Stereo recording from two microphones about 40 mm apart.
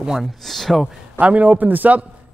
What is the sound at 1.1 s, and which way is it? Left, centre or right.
Speech, right.